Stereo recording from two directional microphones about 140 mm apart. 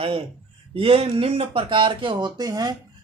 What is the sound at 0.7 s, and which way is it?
Speech, 40° right (ahead or behind).